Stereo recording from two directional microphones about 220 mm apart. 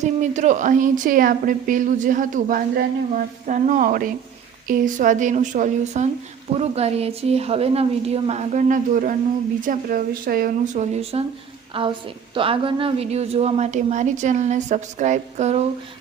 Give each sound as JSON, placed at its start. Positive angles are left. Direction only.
{"t": 0.0, "sound": "a woman's voice", "side_deg": -35}